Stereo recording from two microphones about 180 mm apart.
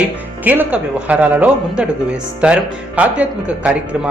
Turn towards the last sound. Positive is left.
turn(degrees=-5)  # may be behind; listen again after turning